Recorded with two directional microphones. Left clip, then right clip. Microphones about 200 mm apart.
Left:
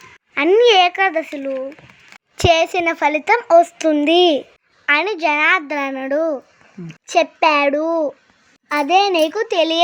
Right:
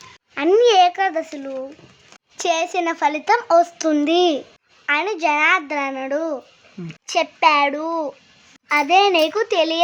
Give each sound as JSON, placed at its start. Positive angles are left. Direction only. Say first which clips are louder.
{"t": 0.3, "sound": "a child's voice", "louder": "left 2 dB", "side_deg": 10}
{"t": 2.4, "sound": "a child's voice", "louder": "left 5 dB", "side_deg": 25}
{"t": 6.8, "sound": "a child's voice", "louder": "right 1 dB", "side_deg": -10}
{"t": 7.1, "sound": "a child's voice", "louder": "left 2 dB", "side_deg": 25}